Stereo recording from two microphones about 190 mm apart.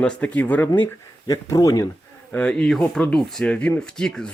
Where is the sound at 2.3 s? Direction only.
5° left (ahead or behind).